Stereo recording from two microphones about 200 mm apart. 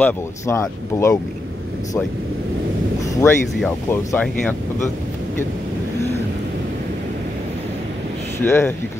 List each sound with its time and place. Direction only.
0.0 s speech: 15° left (ahead or behind)
3.0 s a sound: 15° left (ahead or behind)
3.6 s speech: 10° left (ahead or behind)
8.4 s speech: 10° left (ahead or behind)